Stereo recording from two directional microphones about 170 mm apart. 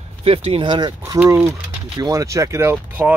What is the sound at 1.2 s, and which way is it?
Speech, 10° right (ahead or behind).